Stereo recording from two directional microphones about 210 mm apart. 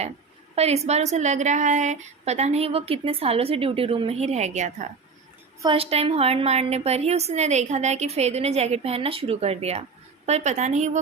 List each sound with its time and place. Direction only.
0.5 s a woman's voice: 30° right (ahead or behind)